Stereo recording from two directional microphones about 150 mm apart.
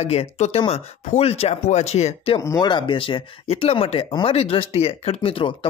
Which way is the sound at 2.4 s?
25° left (ahead or behind).